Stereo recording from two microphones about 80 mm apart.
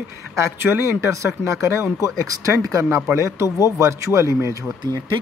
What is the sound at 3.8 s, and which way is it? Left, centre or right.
Speech, right.